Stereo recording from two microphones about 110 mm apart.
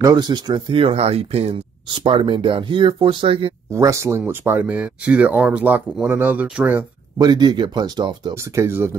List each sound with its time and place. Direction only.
0.0 s speech: 40° right (ahead or behind)
0.7 s speech: 65° right (ahead or behind)
1.9 s speech: 50° right (ahead or behind)
3.7 s speech: 25° right (ahead or behind); by 6.8 s 10° right (ahead or behind)
7.2 s speech: 40° right (ahead or behind)
8.5 s speech: 20° right (ahead or behind)